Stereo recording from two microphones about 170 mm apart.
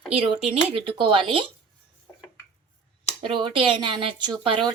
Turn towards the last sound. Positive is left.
turn(degrees=-30)  # may be behind; listen again after turning